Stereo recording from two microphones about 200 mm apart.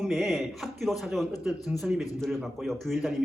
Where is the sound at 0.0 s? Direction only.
Centre (ahead or behind).